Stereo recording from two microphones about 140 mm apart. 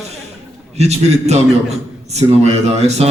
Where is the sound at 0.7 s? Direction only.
50° right (ahead or behind).